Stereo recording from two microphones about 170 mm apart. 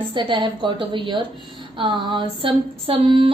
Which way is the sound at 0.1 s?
30° right (ahead or behind).